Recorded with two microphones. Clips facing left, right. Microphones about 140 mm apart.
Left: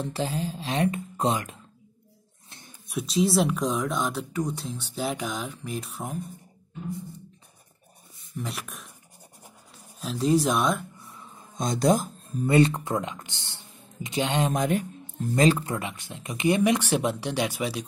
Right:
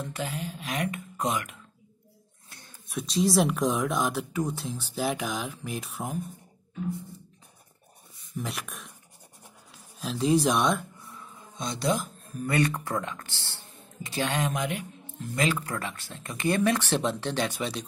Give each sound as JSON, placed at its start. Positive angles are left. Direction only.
{"t": 0.0, "sound": "speech", "side_deg": 30}
{"t": 2.5, "sound": "a sound", "side_deg": 20}
{"t": 2.9, "sound": "speech", "side_deg": 5}
{"t": 8.4, "sound": "speech", "side_deg": 0}
{"t": 9.9, "sound": "speech", "side_deg": 0}
{"t": 11.5, "sound": "speech", "side_deg": 45}
{"t": 12.4, "sound": "speech", "side_deg": 25}
{"t": 14.5, "sound": "speech", "side_deg": 40}
{"t": 15.6, "sound": "speech", "side_deg": 20}